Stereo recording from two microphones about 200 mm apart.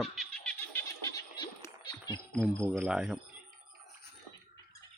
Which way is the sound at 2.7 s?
5° right (ahead or behind).